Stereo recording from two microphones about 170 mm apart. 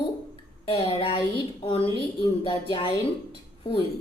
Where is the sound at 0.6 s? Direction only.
30° left (ahead or behind).